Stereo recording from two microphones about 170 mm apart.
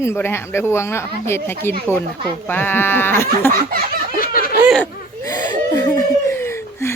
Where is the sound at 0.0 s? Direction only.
15° left (ahead or behind).